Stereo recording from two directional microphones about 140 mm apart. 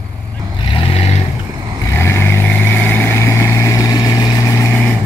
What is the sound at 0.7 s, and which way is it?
Vehicle, 40° left (ahead or behind).